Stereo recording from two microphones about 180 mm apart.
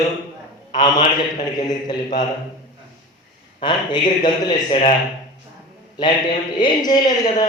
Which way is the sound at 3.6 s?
25° left (ahead or behind).